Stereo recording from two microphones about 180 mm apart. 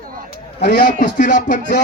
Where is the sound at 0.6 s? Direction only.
60° left (ahead or behind).